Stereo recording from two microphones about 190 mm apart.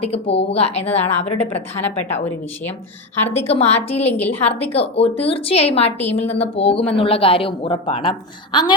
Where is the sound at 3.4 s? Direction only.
35° left (ahead or behind).